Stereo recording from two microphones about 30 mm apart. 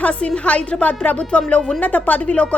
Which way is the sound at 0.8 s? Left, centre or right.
Left.